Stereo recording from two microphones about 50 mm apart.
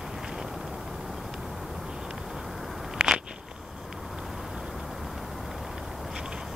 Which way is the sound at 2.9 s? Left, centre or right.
Centre.